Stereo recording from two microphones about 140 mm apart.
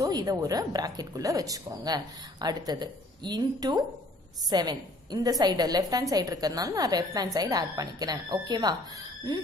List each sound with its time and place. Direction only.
0.0 s a woman's voice: 25° right (ahead or behind)